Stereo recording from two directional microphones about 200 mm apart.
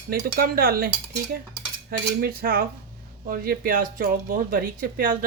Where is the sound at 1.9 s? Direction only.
50° right (ahead or behind).